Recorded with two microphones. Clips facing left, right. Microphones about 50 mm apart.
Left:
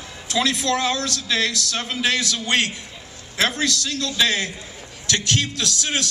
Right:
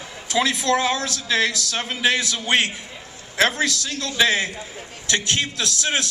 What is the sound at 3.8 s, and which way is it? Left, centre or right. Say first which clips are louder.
A man's voice: right 1 dB; right.